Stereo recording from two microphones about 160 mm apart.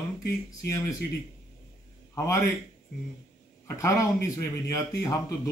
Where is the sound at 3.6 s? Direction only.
20° left (ahead or behind).